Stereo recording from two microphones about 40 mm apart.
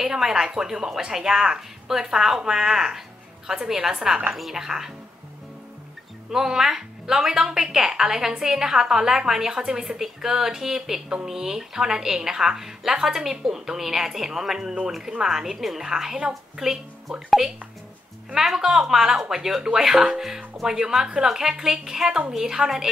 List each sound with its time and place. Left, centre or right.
0.0 s a woman's voice: centre
6.3 s a woman's voice: centre
18.3 s a woman's voice: centre